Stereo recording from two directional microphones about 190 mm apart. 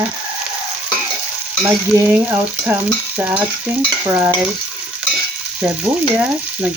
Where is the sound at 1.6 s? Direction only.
10° right (ahead or behind).